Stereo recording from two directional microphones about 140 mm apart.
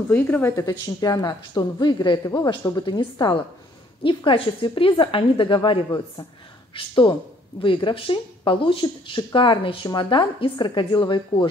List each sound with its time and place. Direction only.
0.1 s a woman's voice: 15° left (ahead or behind); by 11.4 s 35° left (ahead or behind)